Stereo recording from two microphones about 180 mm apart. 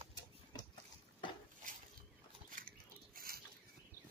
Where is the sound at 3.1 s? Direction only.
55° right (ahead or behind).